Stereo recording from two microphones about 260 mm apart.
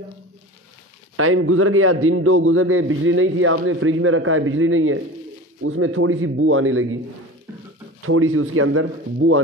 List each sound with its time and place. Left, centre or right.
1.1 s a man's voice: right
8.0 s speech: right